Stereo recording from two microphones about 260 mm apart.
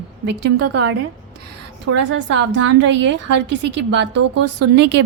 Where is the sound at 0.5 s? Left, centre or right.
Right.